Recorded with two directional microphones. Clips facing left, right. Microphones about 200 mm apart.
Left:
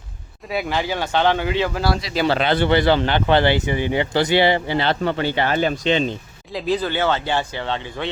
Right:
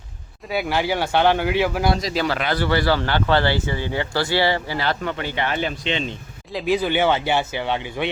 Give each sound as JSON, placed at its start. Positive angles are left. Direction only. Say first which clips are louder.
{"t": 0.4, "sound": "speech", "louder": "right 1 dB", "side_deg": 0}
{"t": 2.2, "sound": "speech", "louder": "left 8 dB", "side_deg": 25}
{"t": 6.5, "sound": "speech", "louder": "right 1 dB", "side_deg": -5}